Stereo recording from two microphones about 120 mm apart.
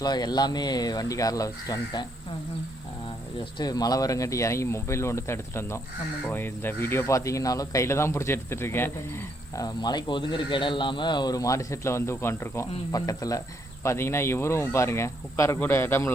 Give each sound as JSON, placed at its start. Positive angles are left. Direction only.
{"t": 0.0, "sound": "speech", "side_deg": 35}
{"t": 3.6, "sound": "speech", "side_deg": 35}
{"t": 9.6, "sound": "speech", "side_deg": 35}